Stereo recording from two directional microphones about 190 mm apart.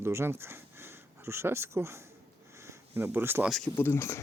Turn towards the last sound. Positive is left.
turn(degrees=15)  # may be behind; listen again after turning